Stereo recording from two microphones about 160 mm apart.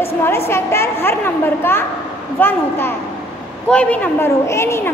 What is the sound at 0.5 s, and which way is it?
A woman's voice, 15° left (ahead or behind).